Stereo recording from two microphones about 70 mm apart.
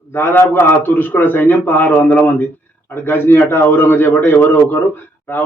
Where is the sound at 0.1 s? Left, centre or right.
Left.